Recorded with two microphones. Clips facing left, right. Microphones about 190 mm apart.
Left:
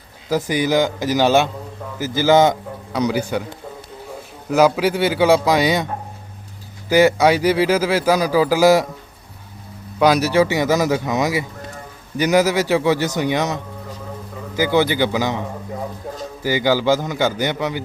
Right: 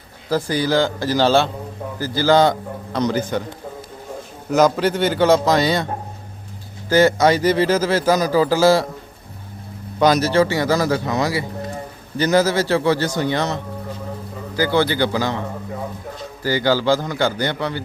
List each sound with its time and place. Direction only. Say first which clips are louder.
0.3 s speech: left 1 dB; 20° left (ahead or behind)
4.4 s speech: left 1 dB; 10° left (ahead or behind)
10.0 s speech: even; 10° left (ahead or behind)